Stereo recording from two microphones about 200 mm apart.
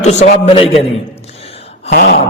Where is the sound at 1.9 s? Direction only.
55° left (ahead or behind).